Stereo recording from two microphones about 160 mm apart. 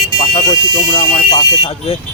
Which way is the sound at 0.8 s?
40° left (ahead or behind).